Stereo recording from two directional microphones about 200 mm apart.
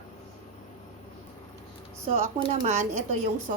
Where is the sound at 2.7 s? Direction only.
35° right (ahead or behind).